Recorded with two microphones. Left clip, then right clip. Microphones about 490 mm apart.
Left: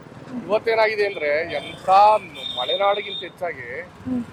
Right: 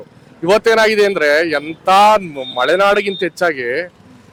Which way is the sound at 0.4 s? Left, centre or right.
Right.